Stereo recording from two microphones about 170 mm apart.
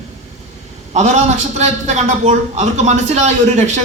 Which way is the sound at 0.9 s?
45° right (ahead or behind).